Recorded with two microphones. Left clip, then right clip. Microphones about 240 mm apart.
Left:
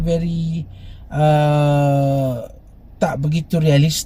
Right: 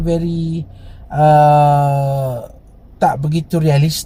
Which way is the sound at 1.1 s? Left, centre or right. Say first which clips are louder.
Right 7 dB; centre.